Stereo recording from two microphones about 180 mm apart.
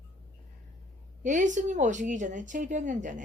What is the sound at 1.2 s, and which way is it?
Speech, 45° right (ahead or behind).